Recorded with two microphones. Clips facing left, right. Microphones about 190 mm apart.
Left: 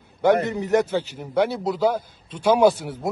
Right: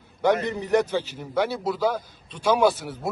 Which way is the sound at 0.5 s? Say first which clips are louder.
Left 2 dB; 20° left (ahead or behind).